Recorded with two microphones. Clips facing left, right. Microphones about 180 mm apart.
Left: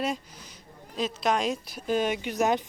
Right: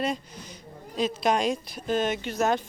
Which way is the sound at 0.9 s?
Centre (ahead or behind).